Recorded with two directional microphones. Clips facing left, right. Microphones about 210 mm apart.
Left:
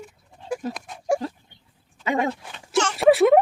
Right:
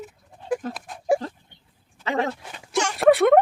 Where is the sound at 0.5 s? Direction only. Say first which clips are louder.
Right 2 dB; centre (ahead or behind).